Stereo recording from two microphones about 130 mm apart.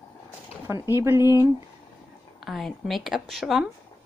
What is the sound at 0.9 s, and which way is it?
Speech, 20° right (ahead or behind).